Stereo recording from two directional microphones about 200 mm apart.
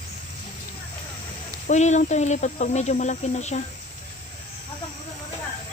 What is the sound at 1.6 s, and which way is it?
Speech, 35° left (ahead or behind).